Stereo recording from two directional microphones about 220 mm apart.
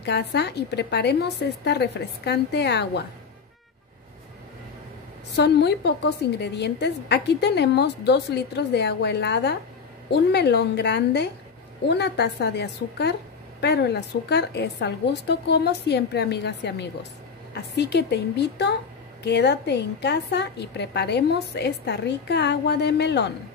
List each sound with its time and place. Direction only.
0.0 s a woman's voice: 50° left (ahead or behind)
5.3 s a woman's voice: 50° left (ahead or behind)